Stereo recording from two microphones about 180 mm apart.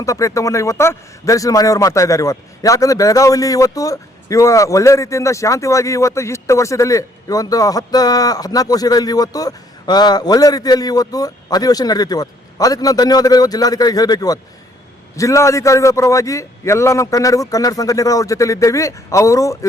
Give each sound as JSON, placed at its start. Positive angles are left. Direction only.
{"t": 0.0, "sound": "a man's voice", "side_deg": 20}